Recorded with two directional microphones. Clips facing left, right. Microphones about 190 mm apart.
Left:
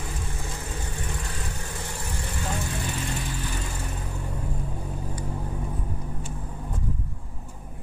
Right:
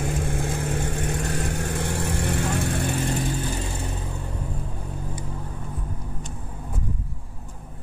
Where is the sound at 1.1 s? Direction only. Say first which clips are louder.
Right 8 dB; 50° right (ahead or behind).